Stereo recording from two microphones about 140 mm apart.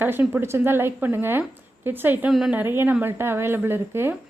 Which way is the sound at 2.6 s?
15° right (ahead or behind).